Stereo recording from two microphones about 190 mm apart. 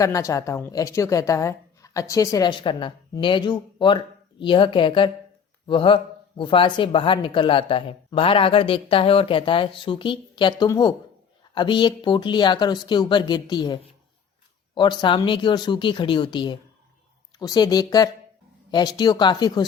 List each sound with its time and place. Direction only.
0.0 s a woman's voice: 15° left (ahead or behind)
14.8 s speech: 25° left (ahead or behind)